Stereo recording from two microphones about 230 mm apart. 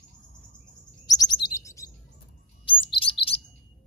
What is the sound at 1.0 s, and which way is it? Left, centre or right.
Chirp, centre.